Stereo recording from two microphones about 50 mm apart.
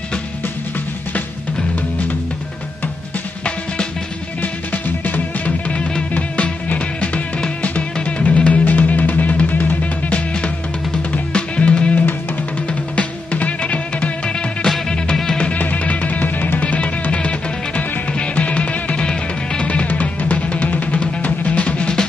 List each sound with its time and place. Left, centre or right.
5.0 s music: left
16.6 s music: left